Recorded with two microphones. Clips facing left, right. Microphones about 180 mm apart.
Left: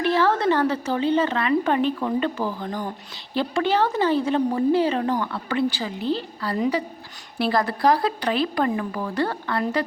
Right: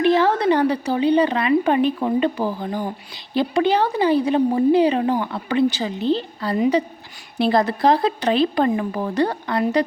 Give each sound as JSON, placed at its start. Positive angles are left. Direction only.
{"t": 0.0, "sound": "a woman's voice", "side_deg": -20}